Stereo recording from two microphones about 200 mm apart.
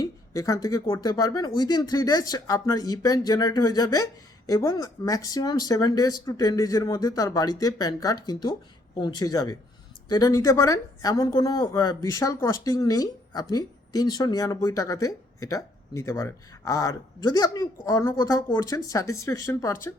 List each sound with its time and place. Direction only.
0.0 s speech: 15° left (ahead or behind)